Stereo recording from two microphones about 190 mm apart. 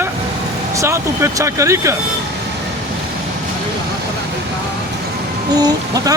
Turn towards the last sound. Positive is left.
turn(degrees=-20)  # may be behind; listen again after turning